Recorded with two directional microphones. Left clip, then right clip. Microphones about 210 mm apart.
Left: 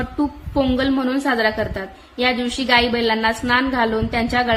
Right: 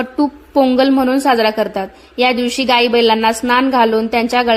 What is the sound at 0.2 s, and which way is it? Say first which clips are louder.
A woman's voice: right 7 dB; 25° right (ahead or behind).